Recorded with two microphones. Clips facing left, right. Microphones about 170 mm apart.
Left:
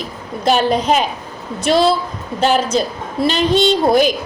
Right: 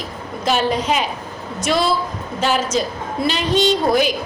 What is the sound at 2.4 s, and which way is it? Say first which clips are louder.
A woman's voice: left 4 dB; 35° left (ahead or behind).